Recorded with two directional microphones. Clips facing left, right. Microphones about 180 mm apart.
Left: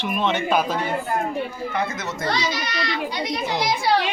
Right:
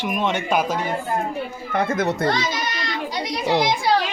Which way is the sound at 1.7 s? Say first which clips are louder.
Right 5 dB; 50° right (ahead or behind).